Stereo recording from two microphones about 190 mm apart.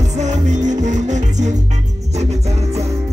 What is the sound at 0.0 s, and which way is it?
Music, 40° right (ahead or behind).